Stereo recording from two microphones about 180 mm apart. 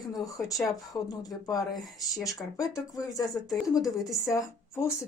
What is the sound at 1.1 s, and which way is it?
Speech, 20° left (ahead or behind).